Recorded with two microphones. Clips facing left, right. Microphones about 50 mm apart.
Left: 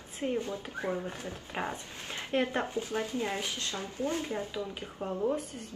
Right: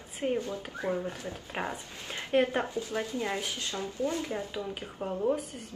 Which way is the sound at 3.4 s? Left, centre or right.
Left.